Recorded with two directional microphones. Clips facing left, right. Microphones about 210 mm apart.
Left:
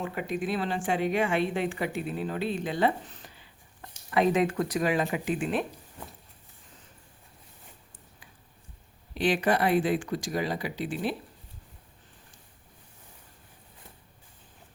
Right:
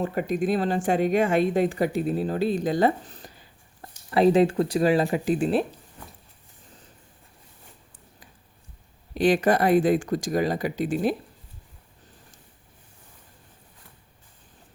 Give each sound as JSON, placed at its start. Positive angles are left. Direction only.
{"t": 0.0, "sound": "speech", "side_deg": -40}
{"t": 9.1, "sound": "speech", "side_deg": -45}